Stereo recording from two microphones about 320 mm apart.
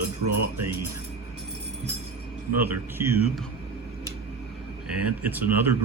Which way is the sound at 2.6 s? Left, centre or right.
Centre.